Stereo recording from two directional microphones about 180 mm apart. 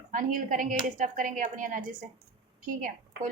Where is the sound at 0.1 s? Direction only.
50° right (ahead or behind).